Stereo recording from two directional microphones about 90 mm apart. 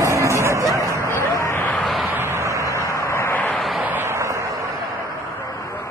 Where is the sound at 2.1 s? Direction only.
25° right (ahead or behind).